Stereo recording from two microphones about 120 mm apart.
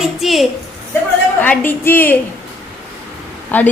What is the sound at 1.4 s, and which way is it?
Speech, 15° left (ahead or behind).